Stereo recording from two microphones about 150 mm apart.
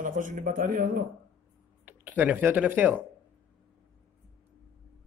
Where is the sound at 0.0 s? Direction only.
60° right (ahead or behind).